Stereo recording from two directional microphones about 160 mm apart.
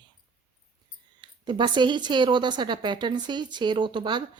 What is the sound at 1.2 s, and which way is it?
Speech, 30° right (ahead or behind).